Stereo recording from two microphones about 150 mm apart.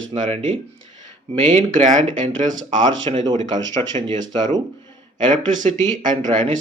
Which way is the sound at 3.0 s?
30° right (ahead or behind).